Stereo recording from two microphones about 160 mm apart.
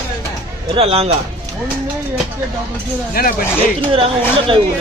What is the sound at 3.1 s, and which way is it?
Speech, 65° left (ahead or behind).